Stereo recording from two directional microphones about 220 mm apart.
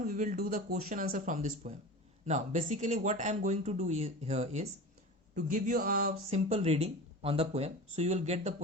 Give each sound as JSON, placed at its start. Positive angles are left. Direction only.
{"t": 0.0, "sound": "speech", "side_deg": -35}